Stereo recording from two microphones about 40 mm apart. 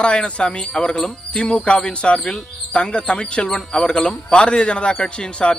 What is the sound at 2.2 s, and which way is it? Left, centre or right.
Speech, centre.